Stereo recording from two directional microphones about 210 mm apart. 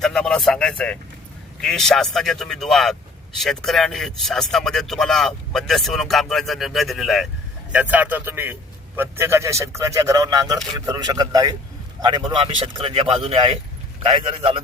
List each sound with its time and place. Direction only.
0.0 s a man's voice: 5° left (ahead or behind); by 14.6 s 25° right (ahead or behind)